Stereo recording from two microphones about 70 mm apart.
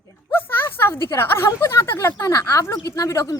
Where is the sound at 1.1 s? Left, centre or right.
Left.